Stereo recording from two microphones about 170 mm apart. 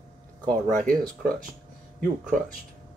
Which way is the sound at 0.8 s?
55° right (ahead or behind).